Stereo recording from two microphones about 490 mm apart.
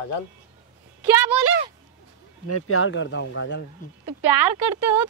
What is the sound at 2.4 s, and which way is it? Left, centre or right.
Speech, left.